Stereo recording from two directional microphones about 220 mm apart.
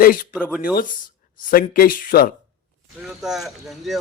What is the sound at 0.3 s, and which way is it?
Speech, 5° left (ahead or behind).